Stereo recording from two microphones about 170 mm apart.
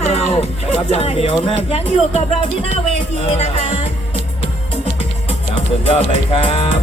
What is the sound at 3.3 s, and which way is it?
Speech, 40° left (ahead or behind).